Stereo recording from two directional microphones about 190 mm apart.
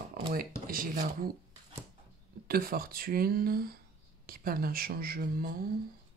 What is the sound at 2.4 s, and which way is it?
Speech, 50° right (ahead or behind).